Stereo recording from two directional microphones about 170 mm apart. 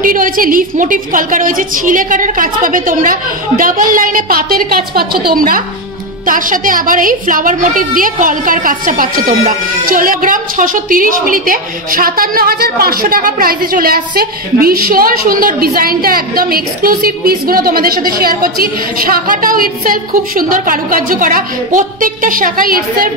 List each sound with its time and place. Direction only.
0.0 s a woman's voice: 55° right (ahead or behind)